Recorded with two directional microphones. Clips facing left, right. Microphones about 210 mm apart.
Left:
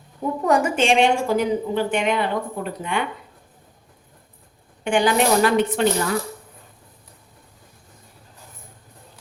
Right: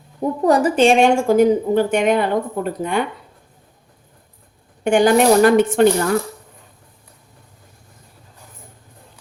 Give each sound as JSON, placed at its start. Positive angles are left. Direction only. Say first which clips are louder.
{"t": 0.4, "sound": "a woman's voice", "louder": "right 5 dB", "side_deg": -35}
{"t": 4.8, "sound": "a woman's voice", "louder": "right 5 dB", "side_deg": -45}